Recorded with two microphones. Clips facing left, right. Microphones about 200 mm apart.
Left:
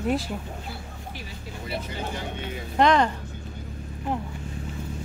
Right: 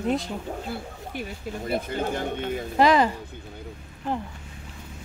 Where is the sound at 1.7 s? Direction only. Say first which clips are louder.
Right 5 dB; 50° right (ahead or behind).